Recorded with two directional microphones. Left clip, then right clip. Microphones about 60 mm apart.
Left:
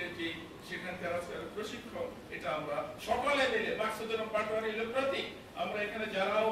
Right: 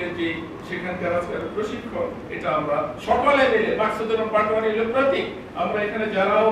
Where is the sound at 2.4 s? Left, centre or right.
Left.